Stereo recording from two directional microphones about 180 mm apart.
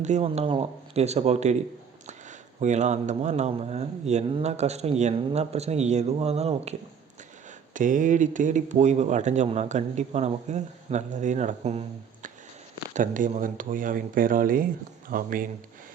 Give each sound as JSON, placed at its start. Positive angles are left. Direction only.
{"t": 0.0, "sound": "speech", "side_deg": -40}
{"t": 2.6, "sound": "speech", "side_deg": -40}